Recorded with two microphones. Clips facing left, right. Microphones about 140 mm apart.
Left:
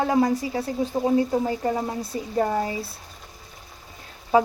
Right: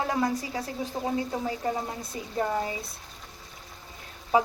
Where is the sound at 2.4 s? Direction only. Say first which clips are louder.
Left 3 dB; 40° left (ahead or behind).